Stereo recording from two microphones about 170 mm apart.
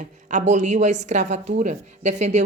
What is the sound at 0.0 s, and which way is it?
Speech, 45° right (ahead or behind).